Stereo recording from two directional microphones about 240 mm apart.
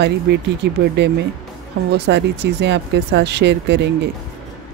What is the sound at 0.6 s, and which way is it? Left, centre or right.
Speech, right.